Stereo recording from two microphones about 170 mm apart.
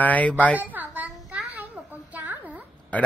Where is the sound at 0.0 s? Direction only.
10° left (ahead or behind).